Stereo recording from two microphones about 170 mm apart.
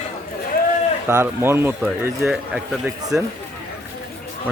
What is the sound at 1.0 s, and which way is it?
Speech, 15° right (ahead or behind).